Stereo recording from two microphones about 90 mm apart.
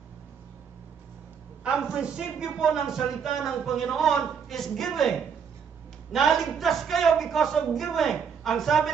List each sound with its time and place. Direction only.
1.6 s a man's voice: 10° right (ahead or behind)